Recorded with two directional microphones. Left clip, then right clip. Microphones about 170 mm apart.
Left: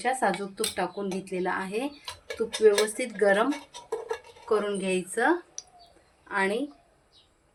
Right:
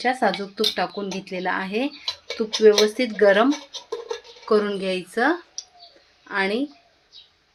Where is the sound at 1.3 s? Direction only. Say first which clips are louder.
Right 5 dB; 45° right (ahead or behind).